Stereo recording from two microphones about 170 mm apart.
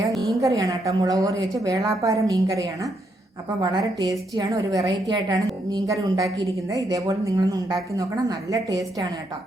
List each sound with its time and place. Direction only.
0.4 s a woman's voice: 20° right (ahead or behind)